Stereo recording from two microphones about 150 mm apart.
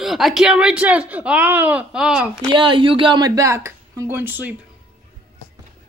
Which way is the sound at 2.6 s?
35° right (ahead or behind).